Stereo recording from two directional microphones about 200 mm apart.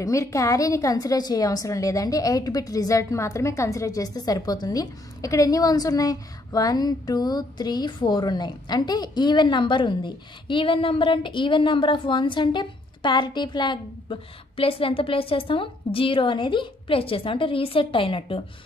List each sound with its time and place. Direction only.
0.0 s a woman's voice: 15° left (ahead or behind)